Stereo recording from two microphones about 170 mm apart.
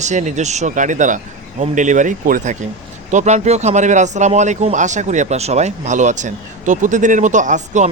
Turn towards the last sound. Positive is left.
turn(degrees=-45)  # may be behind; listen again after turning